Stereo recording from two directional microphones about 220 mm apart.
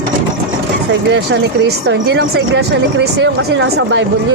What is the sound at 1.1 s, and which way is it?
Speech, 50° right (ahead or behind).